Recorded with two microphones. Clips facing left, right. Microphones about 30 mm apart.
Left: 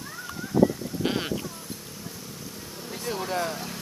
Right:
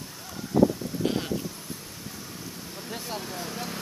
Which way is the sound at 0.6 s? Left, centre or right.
Centre.